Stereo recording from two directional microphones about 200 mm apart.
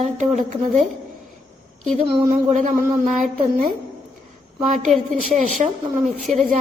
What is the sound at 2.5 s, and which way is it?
Speech, 40° right (ahead or behind).